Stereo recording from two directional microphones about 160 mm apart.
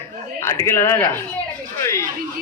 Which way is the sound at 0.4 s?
15° left (ahead or behind).